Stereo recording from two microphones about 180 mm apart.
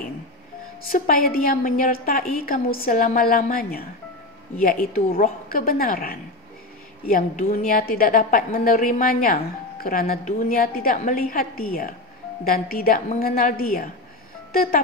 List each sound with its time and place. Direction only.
0.9 s a woman's voice: 50° left (ahead or behind)